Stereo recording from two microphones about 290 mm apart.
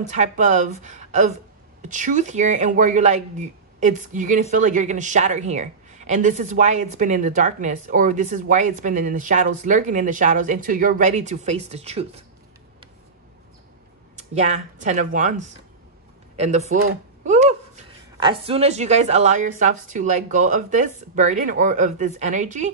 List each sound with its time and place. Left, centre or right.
0.1 s speech: right
14.3 s speech: right
17.2 s a sound: right
18.1 s speech: centre